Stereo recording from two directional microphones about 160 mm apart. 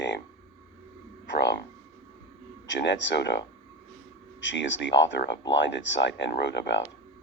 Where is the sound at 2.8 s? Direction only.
90° left.